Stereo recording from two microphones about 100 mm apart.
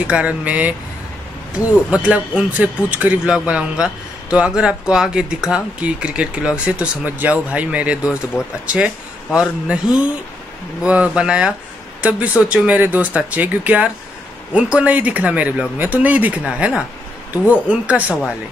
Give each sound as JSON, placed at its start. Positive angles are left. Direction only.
{"t": 0.0, "sound": "a man's voice", "side_deg": -10}